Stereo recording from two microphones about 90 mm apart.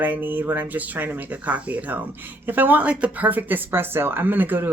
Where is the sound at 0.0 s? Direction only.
20° right (ahead or behind).